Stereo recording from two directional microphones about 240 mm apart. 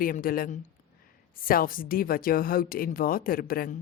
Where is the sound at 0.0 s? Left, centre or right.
Left.